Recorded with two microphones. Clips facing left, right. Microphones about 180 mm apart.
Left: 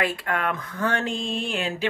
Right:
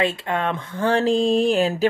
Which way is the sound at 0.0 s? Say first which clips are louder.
Right 4 dB; 25° right (ahead or behind).